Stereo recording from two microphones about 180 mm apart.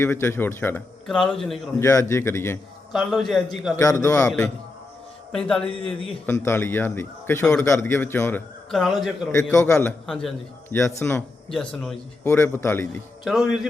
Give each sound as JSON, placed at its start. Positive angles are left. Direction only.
{"t": 0.0, "sound": "a man's voice", "side_deg": 15}
{"t": 1.8, "sound": "a man's voice", "side_deg": 15}
{"t": 2.9, "sound": "a man's voice", "side_deg": 0}
{"t": 3.8, "sound": "a man's voice", "side_deg": 15}
{"t": 5.3, "sound": "a man's voice", "side_deg": 5}
{"t": 9.3, "sound": "a man's voice", "side_deg": 15}
{"t": 9.7, "sound": "a man's voice", "side_deg": 5}
{"t": 10.8, "sound": "a man's voice", "side_deg": 15}
{"t": 13.2, "sound": "a man's voice", "side_deg": -5}